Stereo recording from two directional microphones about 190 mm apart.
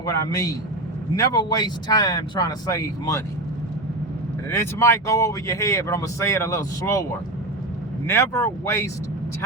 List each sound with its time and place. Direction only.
0.0 s speech: 20° left (ahead or behind)
4.4 s speech: 15° left (ahead or behind)
8.0 s speech: 15° left (ahead or behind)